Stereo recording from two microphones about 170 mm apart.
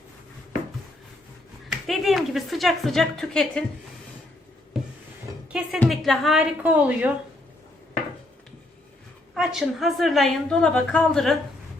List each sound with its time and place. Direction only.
1.7 s a woman's voice: centre (ahead or behind)
4.7 s a sound: centre (ahead or behind)
5.5 s a woman's voice: 5° right (ahead or behind)
9.3 s a woman's voice: centre (ahead or behind)